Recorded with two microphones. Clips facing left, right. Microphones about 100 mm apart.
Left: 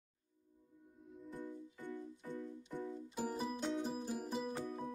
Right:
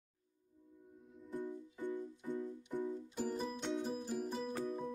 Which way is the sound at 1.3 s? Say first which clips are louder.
Right 5 dB; 15° right (ahead or behind).